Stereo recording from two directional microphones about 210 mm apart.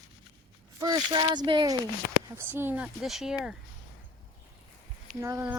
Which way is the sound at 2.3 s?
10° right (ahead or behind).